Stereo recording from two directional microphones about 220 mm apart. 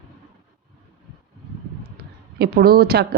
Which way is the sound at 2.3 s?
45° right (ahead or behind).